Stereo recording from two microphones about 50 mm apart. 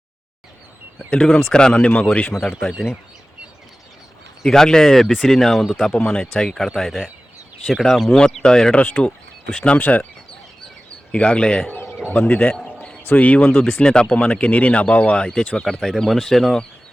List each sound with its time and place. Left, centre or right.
1.1 s speech: left
4.4 s speech: centre
8.7 s speech: left
11.1 s speech: left
12.1 s speech: left
13.7 s speech: centre
15.8 s speech: centre